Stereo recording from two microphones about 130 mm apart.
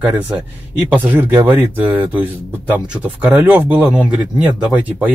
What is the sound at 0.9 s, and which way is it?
Speech, 15° right (ahead or behind).